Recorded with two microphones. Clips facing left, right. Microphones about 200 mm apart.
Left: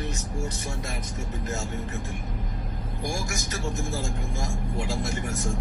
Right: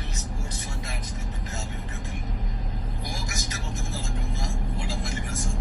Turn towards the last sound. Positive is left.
turn(degrees=50)  # may be behind; listen again after turning